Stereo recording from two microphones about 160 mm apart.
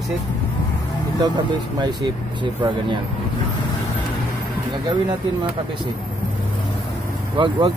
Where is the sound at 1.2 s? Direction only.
25° right (ahead or behind).